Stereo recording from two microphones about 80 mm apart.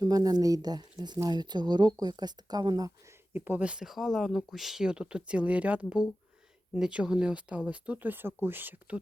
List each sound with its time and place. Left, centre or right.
0.0 s speech: right
3.1 s speech: right
3.8 s speech: centre; by 9.0 s right